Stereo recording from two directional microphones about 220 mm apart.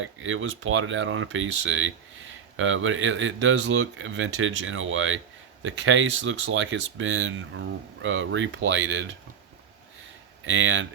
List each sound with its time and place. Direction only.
0.0 s speech: 65° right (ahead or behind)
10.4 s speech: 60° right (ahead or behind)